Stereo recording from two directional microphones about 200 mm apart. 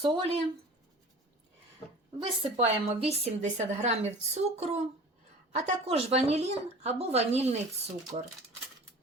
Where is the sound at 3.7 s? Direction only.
35° right (ahead or behind).